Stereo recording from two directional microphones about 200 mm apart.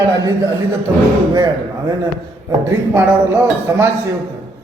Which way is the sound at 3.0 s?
10° right (ahead or behind).